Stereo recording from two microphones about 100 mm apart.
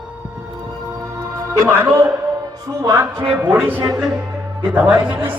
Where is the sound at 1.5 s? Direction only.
30° right (ahead or behind).